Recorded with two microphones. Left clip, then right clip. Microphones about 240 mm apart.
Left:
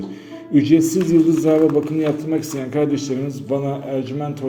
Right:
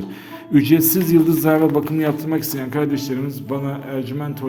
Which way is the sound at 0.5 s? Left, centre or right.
Right.